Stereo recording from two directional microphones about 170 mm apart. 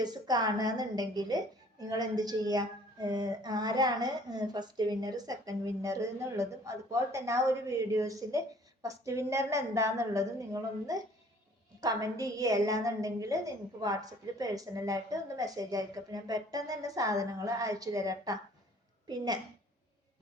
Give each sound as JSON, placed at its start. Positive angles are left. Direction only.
{"t": 0.0, "sound": "a woman's voice", "side_deg": -25}